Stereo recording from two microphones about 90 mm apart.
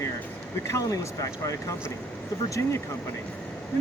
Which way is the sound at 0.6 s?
35° left (ahead or behind).